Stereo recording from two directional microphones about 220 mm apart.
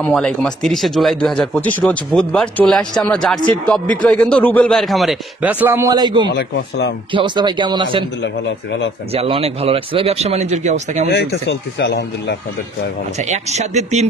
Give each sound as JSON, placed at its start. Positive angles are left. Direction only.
{"t": 0.0, "sound": "speech", "side_deg": 5}
{"t": 6.3, "sound": "speech", "side_deg": 50}
{"t": 7.1, "sound": "speech", "side_deg": -20}
{"t": 9.1, "sound": "speech", "side_deg": -25}
{"t": 11.1, "sound": "speech", "side_deg": 50}
{"t": 13.3, "sound": "speech", "side_deg": -30}